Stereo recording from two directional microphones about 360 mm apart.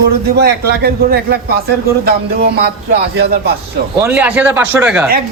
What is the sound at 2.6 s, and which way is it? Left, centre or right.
Speech, right.